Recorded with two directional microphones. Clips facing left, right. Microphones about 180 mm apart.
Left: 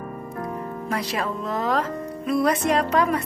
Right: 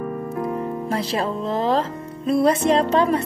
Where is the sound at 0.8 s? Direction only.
30° right (ahead or behind).